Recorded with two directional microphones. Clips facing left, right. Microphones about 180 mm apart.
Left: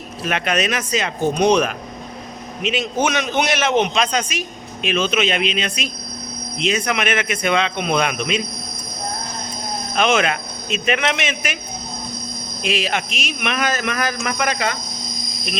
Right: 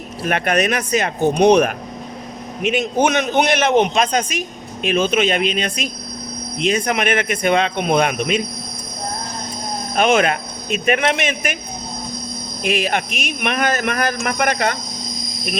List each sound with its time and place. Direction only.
0.3 s a man's voice: 50° right (ahead or behind)
9.9 s a man's voice: 50° right (ahead or behind)
12.6 s a man's voice: 50° right (ahead or behind)